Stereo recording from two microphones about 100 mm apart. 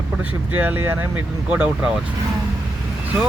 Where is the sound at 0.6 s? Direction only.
20° right (ahead or behind).